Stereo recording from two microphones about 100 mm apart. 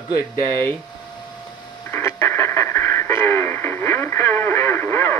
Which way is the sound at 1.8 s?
25° left (ahead or behind).